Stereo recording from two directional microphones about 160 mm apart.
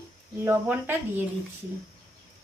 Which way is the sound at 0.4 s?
15° right (ahead or behind).